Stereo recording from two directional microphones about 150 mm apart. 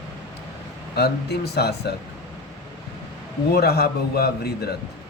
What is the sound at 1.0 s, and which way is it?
Speech, 90° left.